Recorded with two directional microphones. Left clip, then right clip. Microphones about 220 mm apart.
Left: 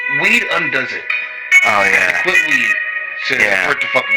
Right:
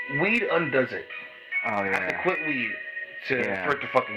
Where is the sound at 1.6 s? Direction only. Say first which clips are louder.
Left 10 dB; 25° left (ahead or behind).